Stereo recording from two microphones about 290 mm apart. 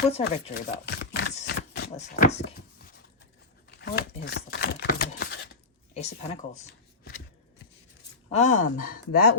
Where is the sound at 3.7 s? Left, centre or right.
Left.